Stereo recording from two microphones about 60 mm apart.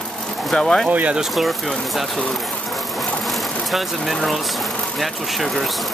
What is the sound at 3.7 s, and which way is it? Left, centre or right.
Speech, centre.